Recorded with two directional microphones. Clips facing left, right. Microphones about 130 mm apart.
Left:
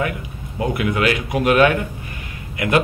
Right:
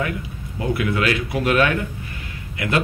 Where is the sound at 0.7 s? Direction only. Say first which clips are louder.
Left 2 dB; 20° left (ahead or behind).